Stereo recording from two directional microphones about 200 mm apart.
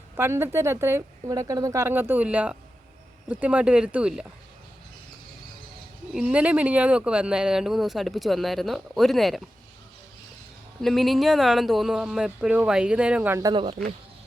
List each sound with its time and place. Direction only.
0.2 s a woman's voice: 10° right (ahead or behind)
6.1 s speech: 5° right (ahead or behind)
10.8 s speech: centre (ahead or behind)
13.5 s speech: 25° right (ahead or behind)